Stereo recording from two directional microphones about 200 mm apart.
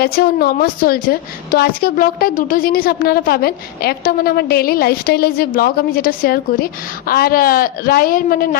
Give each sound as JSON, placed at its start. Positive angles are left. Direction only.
{"t": 0.0, "sound": "a woman's voice", "side_deg": 50}